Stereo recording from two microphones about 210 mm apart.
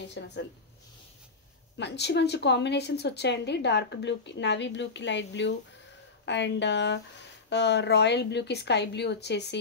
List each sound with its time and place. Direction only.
0.1 s a woman's voice: 55° left (ahead or behind)
1.8 s a woman's voice: 55° left (ahead or behind)